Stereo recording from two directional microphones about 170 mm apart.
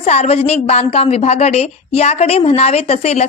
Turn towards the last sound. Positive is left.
turn(degrees=40)  # may be behind; listen again after turning